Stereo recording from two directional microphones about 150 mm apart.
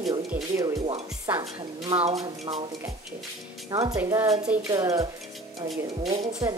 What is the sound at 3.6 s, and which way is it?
Speech, 25° right (ahead or behind).